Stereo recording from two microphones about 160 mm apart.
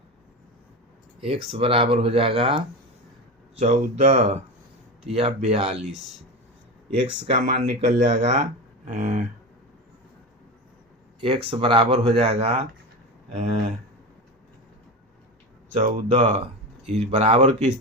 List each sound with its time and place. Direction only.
1.2 s speech: 35° right (ahead or behind)
7.0 s speech: 30° right (ahead or behind)
7.3 s speech: 55° right (ahead or behind)
11.2 s speech: 35° right (ahead or behind)
15.8 s speech: 45° right (ahead or behind)